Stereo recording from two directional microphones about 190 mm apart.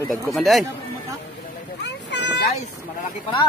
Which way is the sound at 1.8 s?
65° left (ahead or behind).